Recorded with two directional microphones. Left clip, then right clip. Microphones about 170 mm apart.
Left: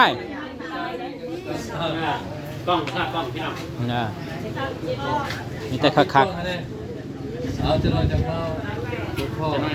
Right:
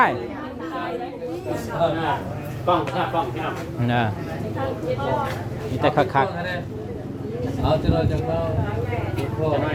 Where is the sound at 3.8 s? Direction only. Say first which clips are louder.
Right 4 dB; 15° right (ahead or behind).